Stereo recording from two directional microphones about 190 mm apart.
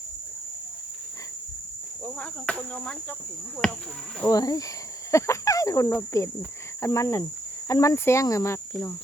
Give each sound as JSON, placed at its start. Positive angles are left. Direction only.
{"t": 2.0, "sound": "cricket", "side_deg": 5}
{"t": 4.3, "sound": "speech", "side_deg": 20}